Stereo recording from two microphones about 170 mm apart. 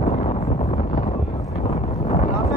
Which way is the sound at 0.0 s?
40° left (ahead or behind).